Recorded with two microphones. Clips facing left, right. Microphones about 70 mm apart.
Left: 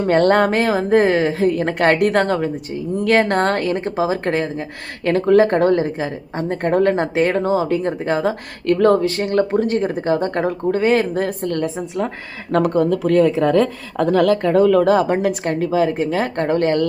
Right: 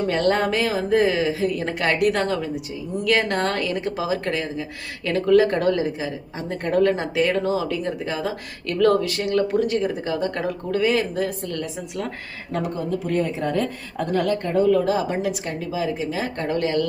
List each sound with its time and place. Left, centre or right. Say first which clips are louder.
0.1 s speech: left 8 dB; left
12.5 s speech: left 9 dB; left